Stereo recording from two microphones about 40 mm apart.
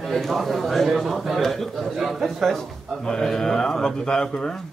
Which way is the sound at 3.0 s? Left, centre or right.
Centre.